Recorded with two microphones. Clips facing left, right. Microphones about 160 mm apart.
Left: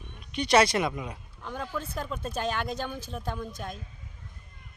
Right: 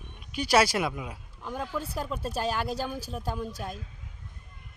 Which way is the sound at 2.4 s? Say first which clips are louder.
Right 1 dB; 5° right (ahead or behind).